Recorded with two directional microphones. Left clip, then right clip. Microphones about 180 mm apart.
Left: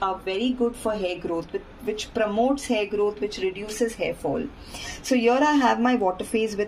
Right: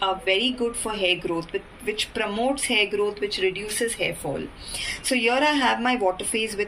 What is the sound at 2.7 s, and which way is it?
Speech, 35° left (ahead or behind).